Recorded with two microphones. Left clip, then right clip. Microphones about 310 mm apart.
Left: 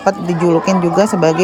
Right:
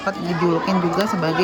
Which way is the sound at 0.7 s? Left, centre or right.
Centre.